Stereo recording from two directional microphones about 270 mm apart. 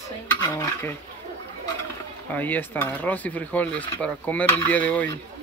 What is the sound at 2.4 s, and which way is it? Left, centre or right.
Speech, centre.